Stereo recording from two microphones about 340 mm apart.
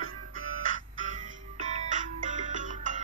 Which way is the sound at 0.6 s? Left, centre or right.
Right.